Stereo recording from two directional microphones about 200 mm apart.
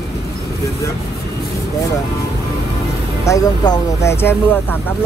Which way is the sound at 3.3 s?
20° left (ahead or behind).